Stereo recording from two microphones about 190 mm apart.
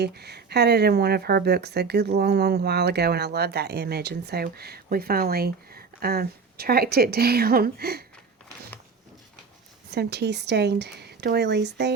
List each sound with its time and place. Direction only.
0.0 s speech: 60° right (ahead or behind)
9.9 s speech: 60° right (ahead or behind)